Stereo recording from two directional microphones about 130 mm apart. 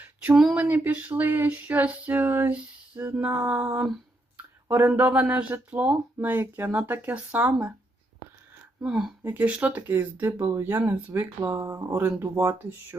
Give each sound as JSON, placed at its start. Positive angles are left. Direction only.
{"t": 0.0, "sound": "a sound", "side_deg": -10}
{"t": 0.5, "sound": "speech", "side_deg": -10}
{"t": 8.8, "sound": "a woman's voice", "side_deg": -5}